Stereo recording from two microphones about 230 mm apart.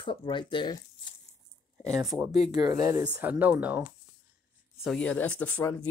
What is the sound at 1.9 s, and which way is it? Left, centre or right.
Speech, centre.